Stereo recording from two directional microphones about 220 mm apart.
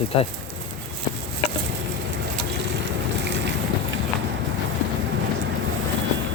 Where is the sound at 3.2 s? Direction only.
55° right (ahead or behind).